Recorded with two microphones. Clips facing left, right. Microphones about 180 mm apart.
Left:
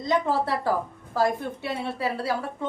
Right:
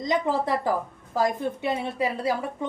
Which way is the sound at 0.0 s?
15° right (ahead or behind).